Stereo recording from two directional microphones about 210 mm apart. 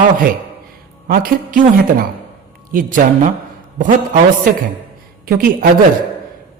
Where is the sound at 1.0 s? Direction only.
45° right (ahead or behind).